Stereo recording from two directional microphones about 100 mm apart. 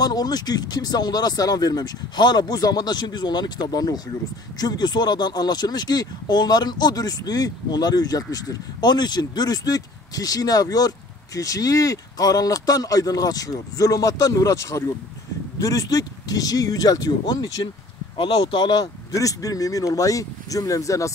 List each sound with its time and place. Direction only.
0.0 s speech: 40° left (ahead or behind)
18.1 s speech: 55° left (ahead or behind)
19.1 s speech: 35° left (ahead or behind)